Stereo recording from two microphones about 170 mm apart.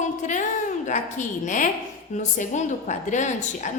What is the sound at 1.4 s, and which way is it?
A woman's voice, 50° left (ahead or behind).